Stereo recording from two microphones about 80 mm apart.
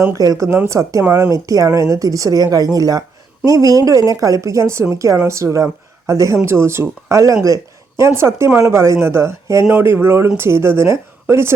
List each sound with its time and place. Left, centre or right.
0.1 s a woman's voice: right
1.0 s speech: right
1.3 s a woman's voice: right